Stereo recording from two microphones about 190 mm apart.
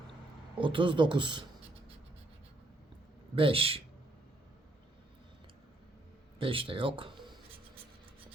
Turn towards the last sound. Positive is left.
turn(degrees=-25)  # may be behind; listen again after turning